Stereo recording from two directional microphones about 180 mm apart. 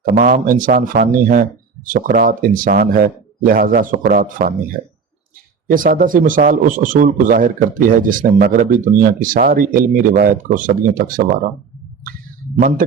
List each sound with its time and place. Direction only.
0.0 s a man's voice: 50° right (ahead or behind)
5.7 s a man's voice: 50° right (ahead or behind)
12.5 s a man's voice: 55° right (ahead or behind)